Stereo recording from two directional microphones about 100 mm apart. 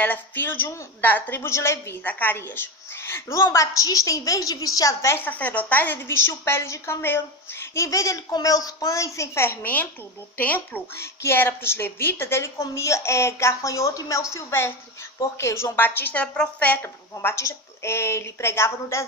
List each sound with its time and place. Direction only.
0.0 s a woman's voice: 20° left (ahead or behind)